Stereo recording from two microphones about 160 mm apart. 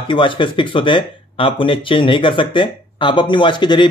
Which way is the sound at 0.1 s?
30° left (ahead or behind).